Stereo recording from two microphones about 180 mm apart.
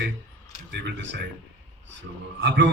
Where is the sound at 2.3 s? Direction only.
80° right.